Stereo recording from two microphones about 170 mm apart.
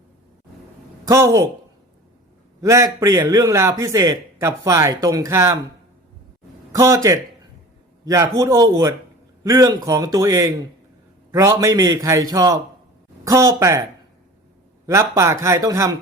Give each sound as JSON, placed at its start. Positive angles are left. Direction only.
{"t": 1.0, "sound": "speech", "side_deg": -15}
{"t": 2.6, "sound": "a man's voice", "side_deg": -20}
{"t": 6.7, "sound": "a man's voice", "side_deg": -20}
{"t": 14.8, "sound": "speech", "side_deg": -15}